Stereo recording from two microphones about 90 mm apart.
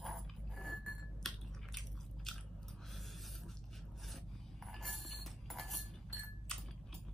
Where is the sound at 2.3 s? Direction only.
5° left (ahead or behind).